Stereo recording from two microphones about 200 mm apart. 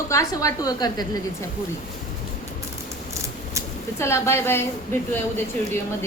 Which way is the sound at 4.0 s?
15° left (ahead or behind).